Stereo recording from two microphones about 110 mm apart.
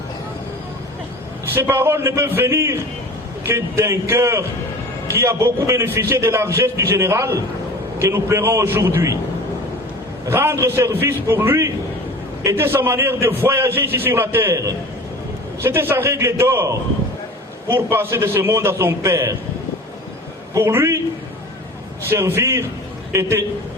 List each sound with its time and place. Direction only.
1.5 s a man's voice: 20° right (ahead or behind)
10.2 s a man's voice: 25° right (ahead or behind)
20.5 s a man's voice: 25° right (ahead or behind)
22.1 s a man's voice: 25° right (ahead or behind)